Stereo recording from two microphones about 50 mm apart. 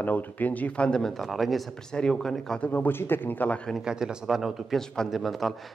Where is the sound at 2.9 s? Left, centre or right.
Left.